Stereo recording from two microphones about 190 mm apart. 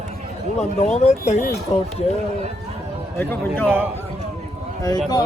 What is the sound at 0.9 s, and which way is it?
Speech, 35° left (ahead or behind).